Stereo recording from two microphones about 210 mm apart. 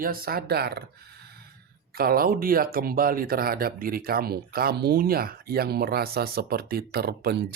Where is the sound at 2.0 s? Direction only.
45° right (ahead or behind).